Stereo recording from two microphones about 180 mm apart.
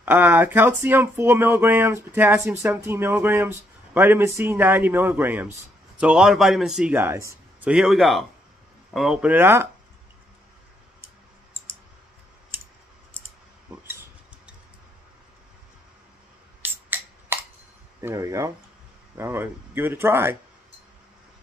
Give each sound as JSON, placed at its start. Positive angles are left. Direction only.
{"t": 0.0, "sound": "speech", "side_deg": -10}
{"t": 7.7, "sound": "a man's voice", "side_deg": 0}
{"t": 16.6, "sound": "a sound", "side_deg": -10}
{"t": 18.0, "sound": "speech", "side_deg": -15}